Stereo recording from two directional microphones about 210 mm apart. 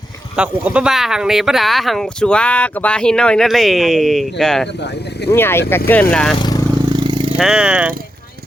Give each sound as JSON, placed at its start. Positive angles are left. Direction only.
{"t": 0.3, "sound": "speech", "side_deg": -5}
{"t": 6.9, "sound": "a sound", "side_deg": -20}
{"t": 7.3, "sound": "speech", "side_deg": -5}